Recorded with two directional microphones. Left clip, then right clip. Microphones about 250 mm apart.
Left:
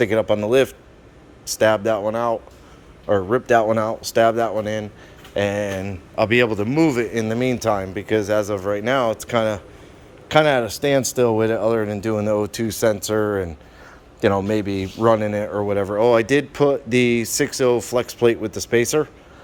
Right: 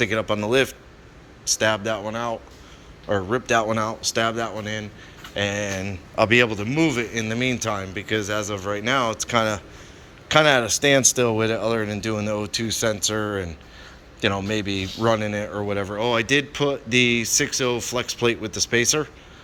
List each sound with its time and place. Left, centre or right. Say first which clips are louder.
0.0 s a man's voice: left 4 dB; centre